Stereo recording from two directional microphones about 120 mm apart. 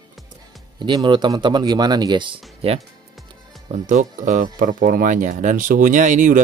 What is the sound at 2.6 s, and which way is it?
Speech, 55° right (ahead or behind).